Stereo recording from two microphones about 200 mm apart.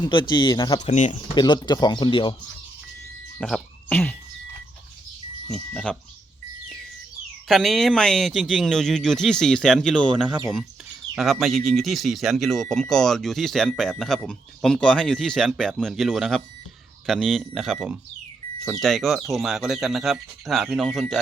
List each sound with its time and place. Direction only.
0.0 s speech: 20° left (ahead or behind)
0.9 s speech: 35° left (ahead or behind)
1.4 s speech: 20° left (ahead or behind)
3.3 s speech: 5° left (ahead or behind)
5.5 s speech: 5° left (ahead or behind)
7.4 s speech: centre (ahead or behind)